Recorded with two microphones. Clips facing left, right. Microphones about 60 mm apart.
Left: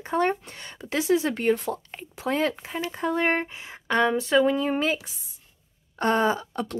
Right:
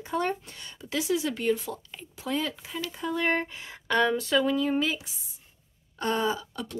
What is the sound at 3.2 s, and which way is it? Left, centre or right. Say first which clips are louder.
Speech: even; left.